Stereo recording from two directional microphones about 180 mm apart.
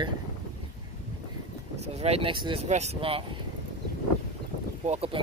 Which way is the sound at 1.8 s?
35° right (ahead or behind).